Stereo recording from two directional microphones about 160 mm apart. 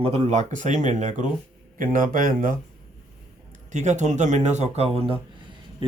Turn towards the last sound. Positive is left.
turn(degrees=-30)  # may be behind; listen again after turning